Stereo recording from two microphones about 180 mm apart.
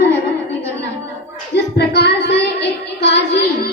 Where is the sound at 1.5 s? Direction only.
65° left (ahead or behind).